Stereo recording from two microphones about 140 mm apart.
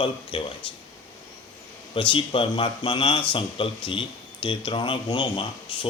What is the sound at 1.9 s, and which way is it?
Speech, 40° left (ahead or behind).